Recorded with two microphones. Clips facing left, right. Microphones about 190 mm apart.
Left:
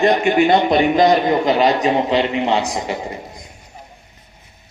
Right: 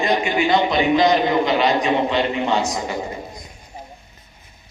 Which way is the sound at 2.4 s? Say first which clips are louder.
Left 2 dB; 25° left (ahead or behind).